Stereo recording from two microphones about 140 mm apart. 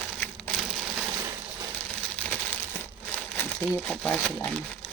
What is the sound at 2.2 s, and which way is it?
Crumpling, 10° left (ahead or behind).